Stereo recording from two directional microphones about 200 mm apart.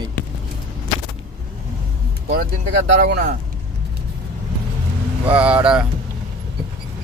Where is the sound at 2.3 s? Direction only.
50° right (ahead or behind).